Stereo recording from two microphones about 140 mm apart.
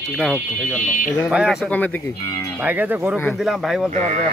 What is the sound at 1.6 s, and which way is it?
Moo, 10° left (ahead or behind).